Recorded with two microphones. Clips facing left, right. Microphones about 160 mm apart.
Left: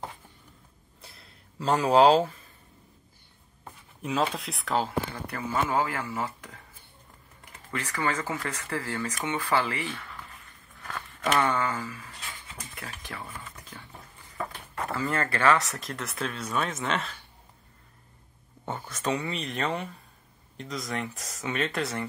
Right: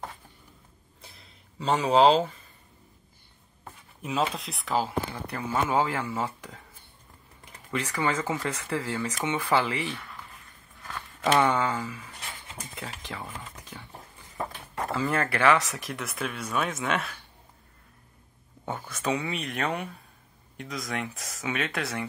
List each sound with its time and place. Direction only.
1.0 s a sound: centre (ahead or behind)
3.6 s speech: centre (ahead or behind)
5.3 s speech: 20° right (ahead or behind)
11.3 s speech: 15° right (ahead or behind)
13.9 s a sound: 20° right (ahead or behind)
16.5 s speech: 5° right (ahead or behind)
18.7 s speech: 5° right (ahead or behind)